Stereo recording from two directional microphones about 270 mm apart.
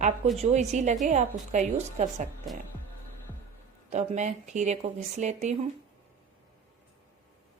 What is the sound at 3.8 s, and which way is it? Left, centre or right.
A woman's voice, right.